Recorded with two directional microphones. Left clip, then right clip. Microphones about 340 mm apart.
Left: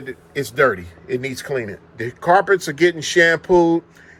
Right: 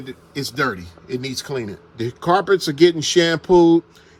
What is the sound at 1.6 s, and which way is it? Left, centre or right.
Speech, centre.